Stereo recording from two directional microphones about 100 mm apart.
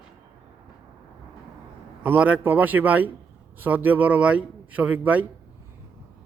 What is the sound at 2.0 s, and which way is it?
Speech, 15° right (ahead or behind).